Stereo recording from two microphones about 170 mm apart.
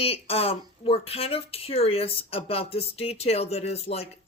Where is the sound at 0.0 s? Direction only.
35° left (ahead or behind).